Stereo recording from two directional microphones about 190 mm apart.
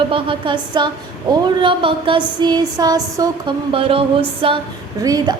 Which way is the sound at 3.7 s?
30° right (ahead or behind).